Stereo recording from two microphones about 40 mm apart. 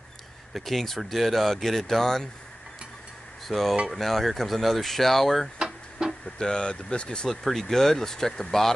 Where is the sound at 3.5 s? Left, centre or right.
Centre.